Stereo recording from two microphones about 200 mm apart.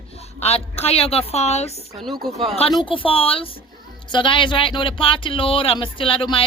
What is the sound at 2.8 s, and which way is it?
Speech, 25° left (ahead or behind).